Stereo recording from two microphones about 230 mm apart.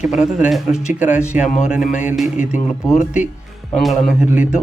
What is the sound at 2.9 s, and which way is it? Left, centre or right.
A man's voice, centre.